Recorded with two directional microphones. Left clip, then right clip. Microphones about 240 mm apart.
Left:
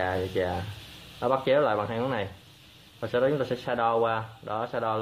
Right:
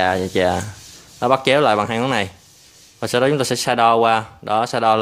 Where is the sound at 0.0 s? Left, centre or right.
Right.